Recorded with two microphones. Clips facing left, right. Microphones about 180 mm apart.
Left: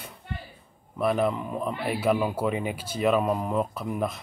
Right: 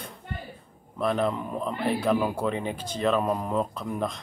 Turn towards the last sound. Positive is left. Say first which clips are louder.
# left 1 dB
turn(degrees=5)  # may be behind; listen again after turning